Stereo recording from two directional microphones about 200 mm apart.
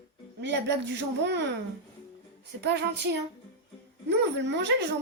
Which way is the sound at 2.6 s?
60° right (ahead or behind).